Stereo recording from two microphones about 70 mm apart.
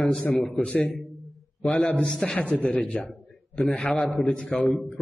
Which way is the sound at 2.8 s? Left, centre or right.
Centre.